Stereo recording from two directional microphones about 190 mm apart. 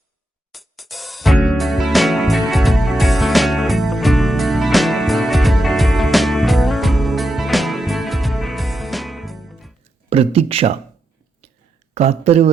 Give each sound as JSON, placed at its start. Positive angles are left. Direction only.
{"t": 0.5, "sound": "music", "side_deg": 0}
{"t": 10.1, "sound": "speech", "side_deg": -30}
{"t": 11.9, "sound": "speech", "side_deg": -35}